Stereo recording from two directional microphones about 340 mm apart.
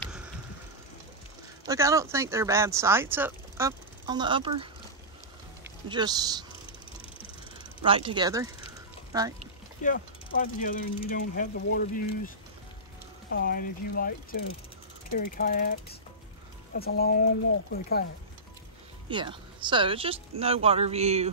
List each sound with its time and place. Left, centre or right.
1.7 s a man's voice: centre
7.8 s speech: centre
9.8 s mechanisms: left
13.3 s mechanisms: left
19.0 s speech: centre